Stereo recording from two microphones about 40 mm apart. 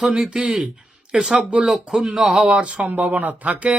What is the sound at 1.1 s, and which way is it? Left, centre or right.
Speech, centre.